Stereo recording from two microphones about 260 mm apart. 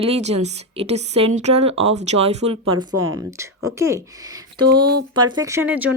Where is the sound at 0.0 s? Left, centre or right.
Right.